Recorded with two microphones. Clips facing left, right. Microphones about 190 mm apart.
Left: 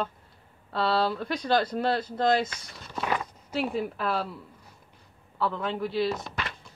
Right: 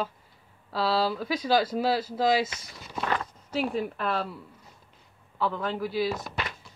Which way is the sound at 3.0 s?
5° left (ahead or behind).